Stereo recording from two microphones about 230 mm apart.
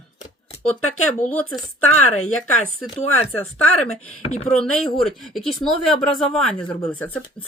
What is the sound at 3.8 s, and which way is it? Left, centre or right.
Speech, left.